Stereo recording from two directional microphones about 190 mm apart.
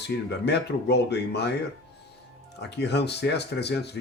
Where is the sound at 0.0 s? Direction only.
60° left (ahead or behind).